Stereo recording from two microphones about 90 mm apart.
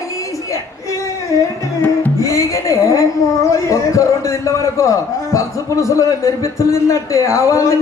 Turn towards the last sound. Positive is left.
turn(degrees=35)  # may be behind; listen again after turning